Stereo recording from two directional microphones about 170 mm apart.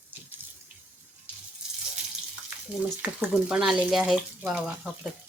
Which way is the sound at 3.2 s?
5° right (ahead or behind).